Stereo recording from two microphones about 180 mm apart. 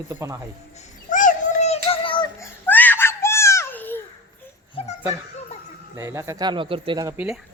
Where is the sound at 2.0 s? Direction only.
25° left (ahead or behind).